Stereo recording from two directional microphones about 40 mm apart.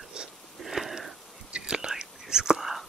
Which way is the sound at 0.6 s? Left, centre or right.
Centre.